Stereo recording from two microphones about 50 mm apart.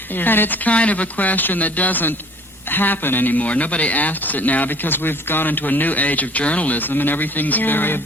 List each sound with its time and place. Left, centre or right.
0.2 s speech: left
0.7 s speech: left